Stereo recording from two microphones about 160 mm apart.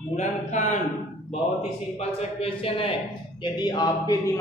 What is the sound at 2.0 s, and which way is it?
Speech, 40° left (ahead or behind).